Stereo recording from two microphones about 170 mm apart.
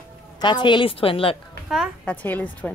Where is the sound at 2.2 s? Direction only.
10° left (ahead or behind).